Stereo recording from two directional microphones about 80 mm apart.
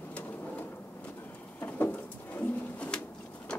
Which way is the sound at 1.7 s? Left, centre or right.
Left.